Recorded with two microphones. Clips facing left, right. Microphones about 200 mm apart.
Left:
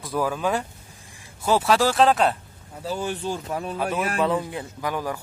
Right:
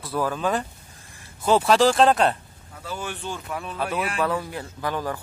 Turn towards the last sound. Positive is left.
turn(degrees=10)  # may be behind; listen again after turning